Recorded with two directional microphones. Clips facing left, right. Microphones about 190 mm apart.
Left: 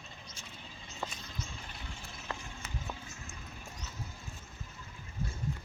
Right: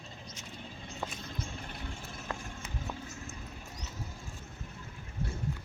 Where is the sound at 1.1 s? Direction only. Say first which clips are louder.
Right 4 dB; 55° right (ahead or behind).